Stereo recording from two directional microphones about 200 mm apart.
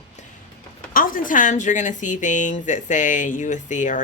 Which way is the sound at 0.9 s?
45° left (ahead or behind).